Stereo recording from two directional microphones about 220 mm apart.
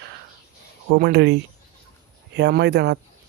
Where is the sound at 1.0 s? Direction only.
50° right (ahead or behind).